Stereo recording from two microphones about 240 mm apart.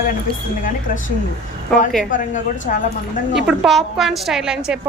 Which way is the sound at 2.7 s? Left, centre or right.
Left.